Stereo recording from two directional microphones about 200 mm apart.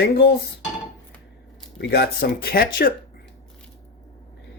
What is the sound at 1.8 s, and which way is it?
Speech, 55° left (ahead or behind).